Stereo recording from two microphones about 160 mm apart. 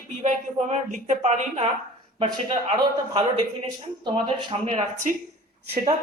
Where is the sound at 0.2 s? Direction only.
45° right (ahead or behind).